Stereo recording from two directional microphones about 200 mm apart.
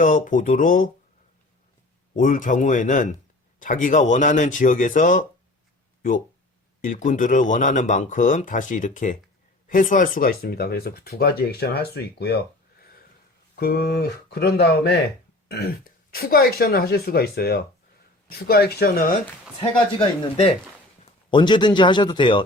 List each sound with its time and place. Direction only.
0.0 s speech: 40° left (ahead or behind)
2.1 s speech: 40° left (ahead or behind)
6.8 s speech: 40° left (ahead or behind)
19.5 s a man's voice: 25° left (ahead or behind)